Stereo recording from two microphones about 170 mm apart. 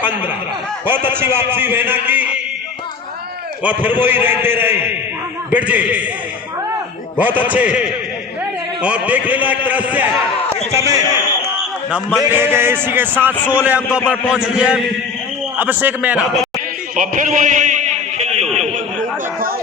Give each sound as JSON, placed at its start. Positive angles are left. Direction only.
{"t": 0.9, "sound": "a man's voice", "side_deg": -10}
{"t": 3.6, "sound": "a man's voice", "side_deg": -10}
{"t": 7.2, "sound": "a man's voice", "side_deg": -10}
{"t": 11.9, "sound": "a man's voice", "side_deg": -5}
{"t": 16.9, "sound": "a sound", "side_deg": -50}